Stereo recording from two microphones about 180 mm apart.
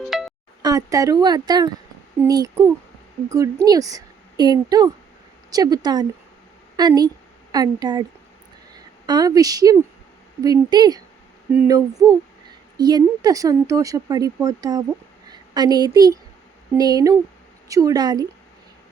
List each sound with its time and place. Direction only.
0.1 s music: centre (ahead or behind)
0.6 s a woman's voice: 20° right (ahead or behind)
9.0 s a woman's voice: 20° right (ahead or behind)